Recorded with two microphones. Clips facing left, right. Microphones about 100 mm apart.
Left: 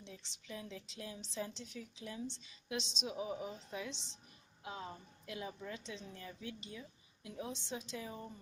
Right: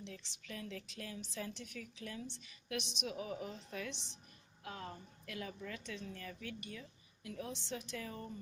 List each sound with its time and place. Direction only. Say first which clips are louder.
0.4 s a woman's voice: right 1 dB; 20° left (ahead or behind)